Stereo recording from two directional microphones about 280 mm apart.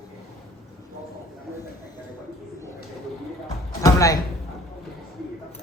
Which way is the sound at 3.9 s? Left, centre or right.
Centre.